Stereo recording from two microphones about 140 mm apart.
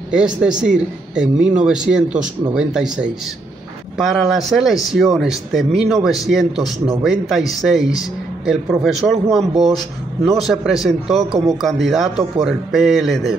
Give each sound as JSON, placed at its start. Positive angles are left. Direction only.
{"t": 0.1, "sound": "speech", "side_deg": -5}